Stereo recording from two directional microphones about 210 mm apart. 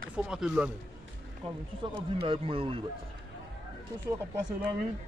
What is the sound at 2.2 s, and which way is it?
Speech, 25° right (ahead or behind).